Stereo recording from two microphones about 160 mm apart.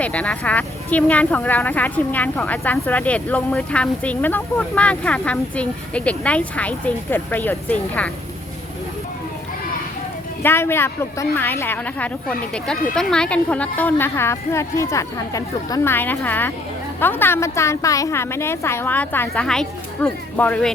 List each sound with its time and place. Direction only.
0.0 s speech: 10° left (ahead or behind)
10.4 s speech: 15° left (ahead or behind)